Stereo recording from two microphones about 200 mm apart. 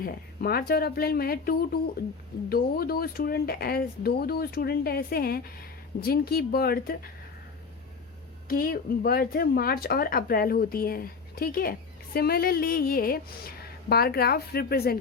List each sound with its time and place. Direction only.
0.0 s speech: 50° left (ahead or behind)
8.4 s speech: 45° left (ahead or behind)